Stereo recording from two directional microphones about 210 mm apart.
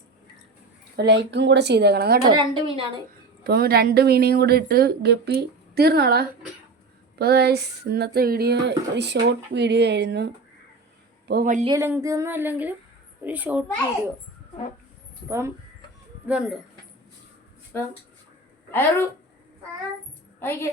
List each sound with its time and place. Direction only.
0.9 s speech: 55° right (ahead or behind)
2.3 s a woman's voice: 20° right (ahead or behind)
3.4 s speech: 45° right (ahead or behind)
11.3 s speech: 45° right (ahead or behind)
11.6 s speech: 15° right (ahead or behind)
15.3 s speech: 15° right (ahead or behind)
18.7 s a woman's voice: 10° left (ahead or behind)
20.4 s a woman's voice: 10° left (ahead or behind)